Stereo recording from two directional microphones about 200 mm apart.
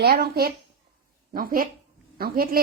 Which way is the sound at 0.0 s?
50° right (ahead or behind).